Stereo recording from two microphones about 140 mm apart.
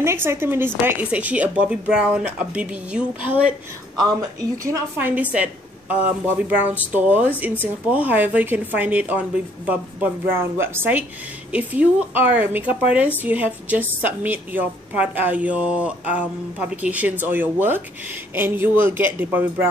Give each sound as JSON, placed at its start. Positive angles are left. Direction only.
{"t": 0.0, "sound": "a woman's voice", "side_deg": -20}
{"t": 4.0, "sound": "a woman's voice", "side_deg": -25}
{"t": 4.9, "sound": "a woman's voice", "side_deg": -15}